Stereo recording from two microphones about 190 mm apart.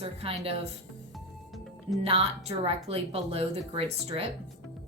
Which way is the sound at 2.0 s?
30° right (ahead or behind).